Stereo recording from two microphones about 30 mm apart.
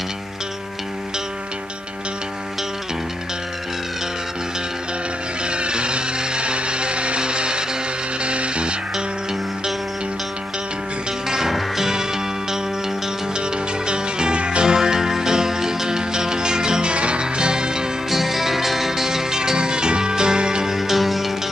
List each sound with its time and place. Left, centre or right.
5.5 s music: right
11.2 s music: centre
13.8 s music: right
16.9 s music: right
18.1 s music: centre; by 20.6 s right
20.6 s music: centre